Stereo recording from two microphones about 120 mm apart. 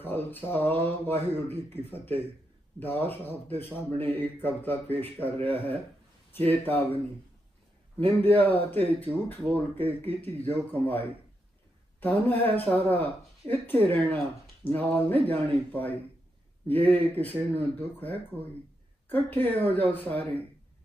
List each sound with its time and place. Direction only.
0.0 s speech: 15° left (ahead or behind)
8.0 s speech: 15° left (ahead or behind)